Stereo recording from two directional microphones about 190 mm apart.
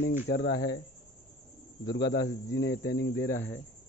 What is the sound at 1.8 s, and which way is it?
Speech, 65° left (ahead or behind).